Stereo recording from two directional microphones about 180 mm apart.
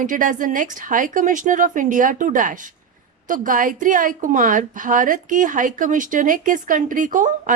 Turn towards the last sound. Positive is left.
turn(degrees=-45)  # may be behind; listen again after turning